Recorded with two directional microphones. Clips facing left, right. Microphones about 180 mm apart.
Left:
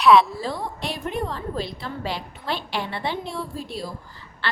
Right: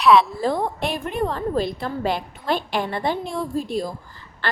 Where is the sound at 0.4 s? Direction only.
50° right (ahead or behind).